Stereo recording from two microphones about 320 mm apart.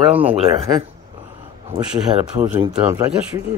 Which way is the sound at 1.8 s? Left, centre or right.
Centre.